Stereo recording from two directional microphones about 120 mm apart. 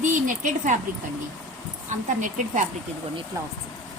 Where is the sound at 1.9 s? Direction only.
90° right.